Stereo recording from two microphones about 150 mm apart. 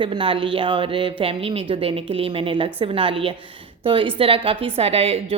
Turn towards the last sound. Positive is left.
turn(degrees=-40)  # may be behind; listen again after turning